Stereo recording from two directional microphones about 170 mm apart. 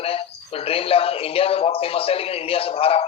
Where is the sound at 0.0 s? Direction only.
35° left (ahead or behind).